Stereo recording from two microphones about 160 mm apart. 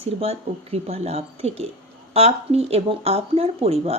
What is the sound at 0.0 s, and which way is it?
A woman's voice, 40° right (ahead or behind).